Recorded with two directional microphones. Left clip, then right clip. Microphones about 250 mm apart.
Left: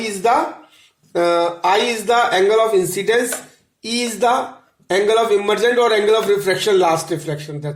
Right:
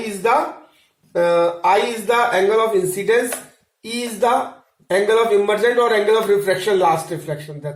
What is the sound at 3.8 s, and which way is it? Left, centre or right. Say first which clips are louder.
Speech: left 2 dB; left.